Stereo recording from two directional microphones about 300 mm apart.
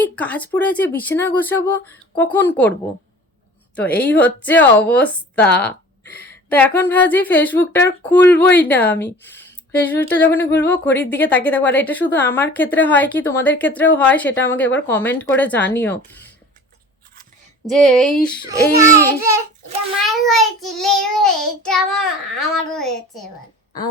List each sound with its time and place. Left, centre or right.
0.0 s speech: centre
3.8 s speech: centre
9.0 s speech: left
9.8 s speech: centre
17.7 s speech: centre
18.4 s speech: centre
20.2 s speech: centre